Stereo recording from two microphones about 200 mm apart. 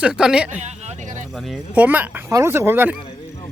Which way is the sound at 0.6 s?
35° right (ahead or behind).